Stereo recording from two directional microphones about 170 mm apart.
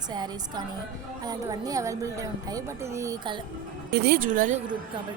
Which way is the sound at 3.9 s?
65° right (ahead or behind).